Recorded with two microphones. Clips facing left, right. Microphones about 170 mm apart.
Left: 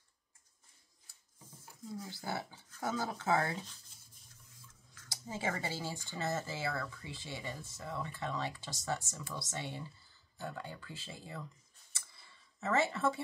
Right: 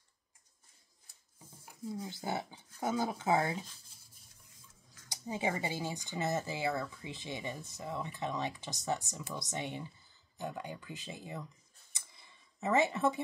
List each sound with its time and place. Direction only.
2.0 s speech: 20° right (ahead or behind)
5.1 s speech: 15° right (ahead or behind)
11.9 s computer keyboard: 20° right (ahead or behind)